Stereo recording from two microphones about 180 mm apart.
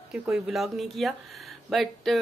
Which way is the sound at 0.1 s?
5° right (ahead or behind).